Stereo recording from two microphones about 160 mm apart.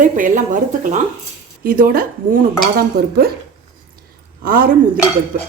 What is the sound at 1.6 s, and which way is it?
Dishes, 65° right (ahead or behind).